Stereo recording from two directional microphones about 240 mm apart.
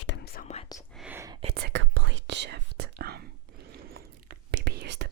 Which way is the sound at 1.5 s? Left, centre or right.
Right.